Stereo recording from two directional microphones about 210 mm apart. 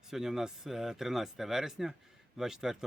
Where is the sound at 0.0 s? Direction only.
Centre (ahead or behind).